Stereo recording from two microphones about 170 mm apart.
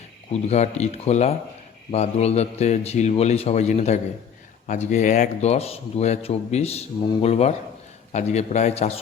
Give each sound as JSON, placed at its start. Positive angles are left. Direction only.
{"t": 0.3, "sound": "speech", "side_deg": 40}